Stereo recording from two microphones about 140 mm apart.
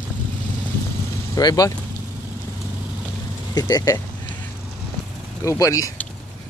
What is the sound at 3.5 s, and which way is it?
Speech, 25° left (ahead or behind).